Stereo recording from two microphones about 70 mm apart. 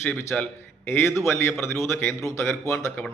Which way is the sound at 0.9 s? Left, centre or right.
Left.